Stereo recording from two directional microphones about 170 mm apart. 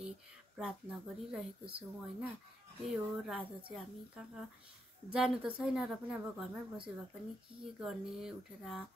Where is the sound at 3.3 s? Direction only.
5° right (ahead or behind).